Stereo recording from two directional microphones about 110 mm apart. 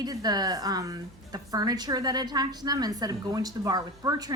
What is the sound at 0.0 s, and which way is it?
A woman's voice, 35° right (ahead or behind).